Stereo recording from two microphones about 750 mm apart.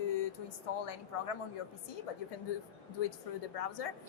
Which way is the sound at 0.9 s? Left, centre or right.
Left.